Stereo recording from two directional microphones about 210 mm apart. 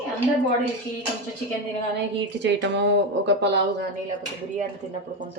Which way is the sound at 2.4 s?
55° right (ahead or behind).